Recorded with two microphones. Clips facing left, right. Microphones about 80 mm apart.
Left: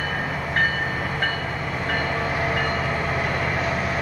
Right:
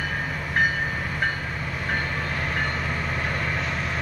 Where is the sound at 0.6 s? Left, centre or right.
Centre.